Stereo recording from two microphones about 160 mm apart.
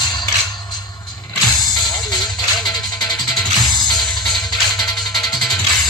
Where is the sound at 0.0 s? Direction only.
25° left (ahead or behind).